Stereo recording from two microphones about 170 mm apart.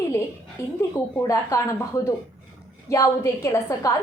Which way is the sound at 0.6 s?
15° left (ahead or behind).